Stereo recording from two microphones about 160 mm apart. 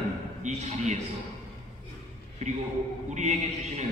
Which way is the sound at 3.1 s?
45° right (ahead or behind).